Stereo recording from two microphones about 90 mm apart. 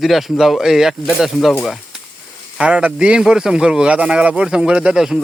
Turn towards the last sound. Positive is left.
turn(degrees=-5)  # may be behind; listen again after turning